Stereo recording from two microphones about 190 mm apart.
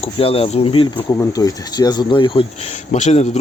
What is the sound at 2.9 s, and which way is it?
Speech, 35° left (ahead or behind).